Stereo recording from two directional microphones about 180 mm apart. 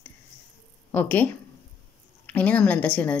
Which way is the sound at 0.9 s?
10° left (ahead or behind).